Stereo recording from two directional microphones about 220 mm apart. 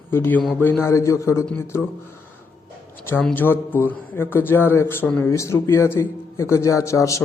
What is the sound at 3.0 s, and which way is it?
Speech, 5° left (ahead or behind).